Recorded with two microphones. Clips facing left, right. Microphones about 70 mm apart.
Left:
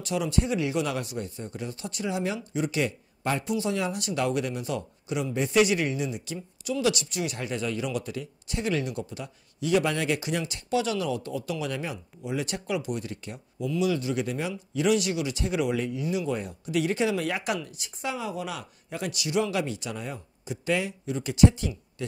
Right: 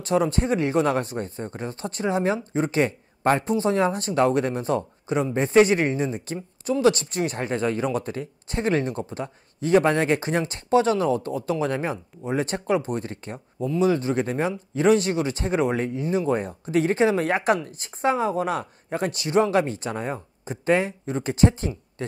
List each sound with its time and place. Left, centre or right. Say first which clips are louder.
0.0 s speech: right 5 dB; right